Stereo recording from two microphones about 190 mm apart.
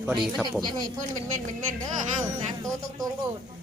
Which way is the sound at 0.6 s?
20° right (ahead or behind).